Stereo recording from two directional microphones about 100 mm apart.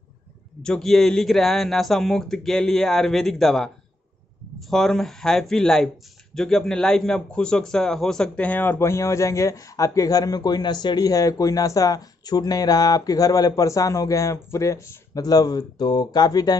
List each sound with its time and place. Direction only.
0.6 s a man's voice: 5° left (ahead or behind); by 16.5 s 40° left (ahead or behind)